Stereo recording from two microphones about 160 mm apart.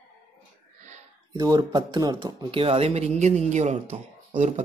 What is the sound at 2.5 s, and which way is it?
Speech, 35° right (ahead or behind).